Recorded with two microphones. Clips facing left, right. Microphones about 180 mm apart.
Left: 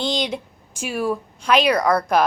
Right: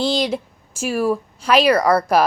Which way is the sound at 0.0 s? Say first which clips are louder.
Right 4 dB; 5° right (ahead or behind).